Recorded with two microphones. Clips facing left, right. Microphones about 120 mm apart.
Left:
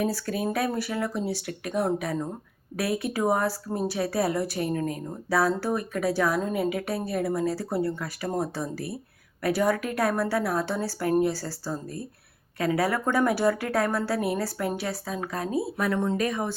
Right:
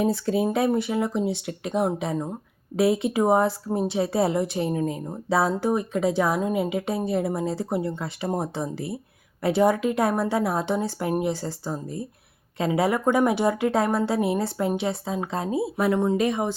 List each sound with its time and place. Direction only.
0.0 s speech: 20° right (ahead or behind)